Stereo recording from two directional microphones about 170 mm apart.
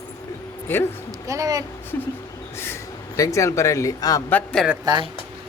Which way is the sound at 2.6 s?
15° left (ahead or behind).